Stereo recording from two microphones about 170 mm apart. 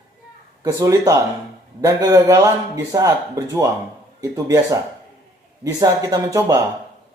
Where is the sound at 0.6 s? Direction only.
20° right (ahead or behind).